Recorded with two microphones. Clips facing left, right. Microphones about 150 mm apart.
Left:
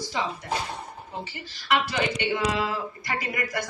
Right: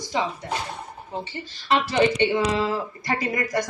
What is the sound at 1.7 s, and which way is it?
Speech, 30° right (ahead or behind).